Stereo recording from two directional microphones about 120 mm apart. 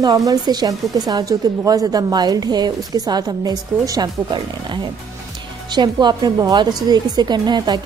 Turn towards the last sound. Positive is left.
turn(degrees=-35)  # may be behind; listen again after turning